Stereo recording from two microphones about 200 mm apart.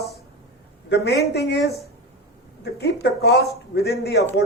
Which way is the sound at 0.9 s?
55° left (ahead or behind).